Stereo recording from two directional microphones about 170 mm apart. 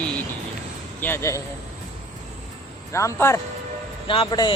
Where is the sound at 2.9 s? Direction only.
15° left (ahead or behind).